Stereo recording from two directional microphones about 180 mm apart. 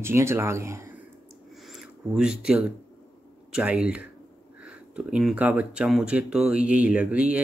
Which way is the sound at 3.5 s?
5° right (ahead or behind).